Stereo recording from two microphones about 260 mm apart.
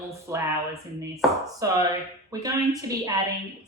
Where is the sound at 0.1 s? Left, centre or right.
Centre.